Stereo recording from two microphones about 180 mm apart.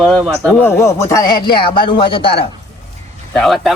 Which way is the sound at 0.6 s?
15° left (ahead or behind).